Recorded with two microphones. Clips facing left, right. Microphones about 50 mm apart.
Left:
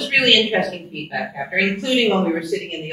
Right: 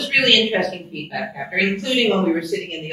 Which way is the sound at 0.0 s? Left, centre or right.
Centre.